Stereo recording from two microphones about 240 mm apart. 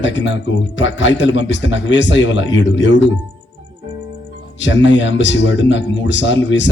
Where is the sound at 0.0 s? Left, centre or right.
Left.